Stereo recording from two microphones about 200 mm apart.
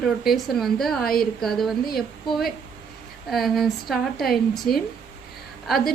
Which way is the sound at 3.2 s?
Centre (ahead or behind).